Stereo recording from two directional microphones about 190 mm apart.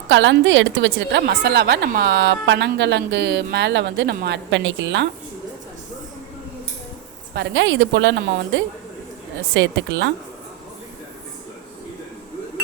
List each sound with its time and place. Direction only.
0.1 s a woman's voice: 75° right (ahead or behind)
1.3 s a woman's voice: 55° right (ahead or behind)
7.3 s a woman's voice: 70° right (ahead or behind)